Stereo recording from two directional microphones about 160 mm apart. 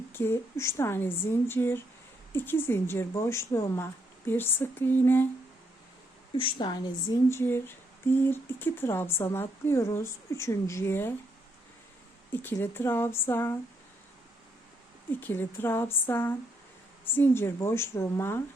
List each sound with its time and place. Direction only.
0.1 s speech: 15° left (ahead or behind)
6.3 s a woman's voice: 30° left (ahead or behind); by 11.1 s 15° left (ahead or behind)
12.3 s speech: 15° left (ahead or behind)
15.2 s speech: 15° left (ahead or behind)